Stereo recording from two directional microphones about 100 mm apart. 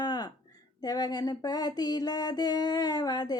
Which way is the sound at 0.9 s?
40° left (ahead or behind).